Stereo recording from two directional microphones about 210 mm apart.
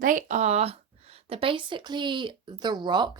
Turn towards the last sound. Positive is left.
turn(degrees=-20)  # may be behind; listen again after turning